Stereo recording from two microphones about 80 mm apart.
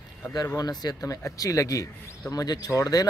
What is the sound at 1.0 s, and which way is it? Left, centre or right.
Speech, left.